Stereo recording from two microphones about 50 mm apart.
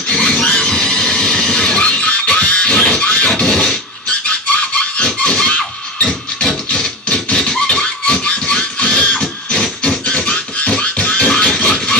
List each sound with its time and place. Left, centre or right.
0.1 s squeal: centre
1.8 s music: left
3.3 s scratching: centre
4.1 s a sound: left
9.6 s music: centre